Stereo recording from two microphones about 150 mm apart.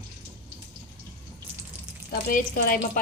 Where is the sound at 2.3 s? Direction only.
70° left (ahead or behind).